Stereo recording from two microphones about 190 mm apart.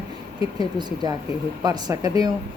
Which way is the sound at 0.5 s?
20° right (ahead or behind).